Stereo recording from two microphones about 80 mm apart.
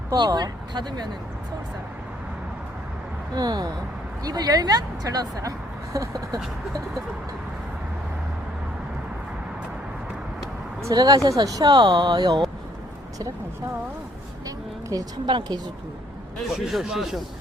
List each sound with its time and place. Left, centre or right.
0.3 s speech: right
3.3 s a woman's voice: right
10.8 s a woman's voice: right
14.4 s a sound: right
15.3 s a woman's voice: right
16.5 s speech: centre